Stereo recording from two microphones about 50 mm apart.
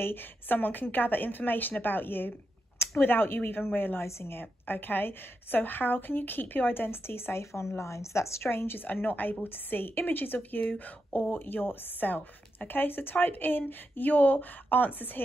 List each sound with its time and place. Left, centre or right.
0.0 s a woman's voice: left
4.0 s a woman's voice: left
4.4 s a woman's voice: left
8.5 s a woman's voice: left